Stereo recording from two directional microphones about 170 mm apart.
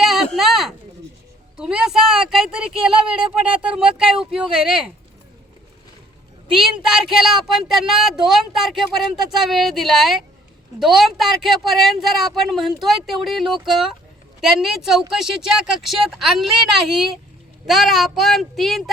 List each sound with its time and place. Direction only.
0.0 s a sound: centre (ahead or behind)
1.5 s speech: 5° right (ahead or behind)
6.6 s speech: 5° right (ahead or behind)